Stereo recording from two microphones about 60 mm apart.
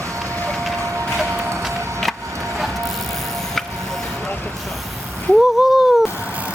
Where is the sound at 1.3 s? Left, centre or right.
Right.